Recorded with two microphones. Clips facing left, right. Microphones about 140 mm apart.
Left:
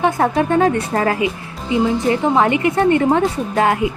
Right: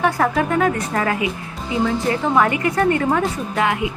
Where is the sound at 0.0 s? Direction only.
25° left (ahead or behind).